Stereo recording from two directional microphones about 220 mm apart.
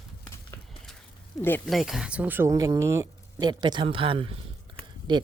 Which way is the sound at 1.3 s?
5° left (ahead or behind).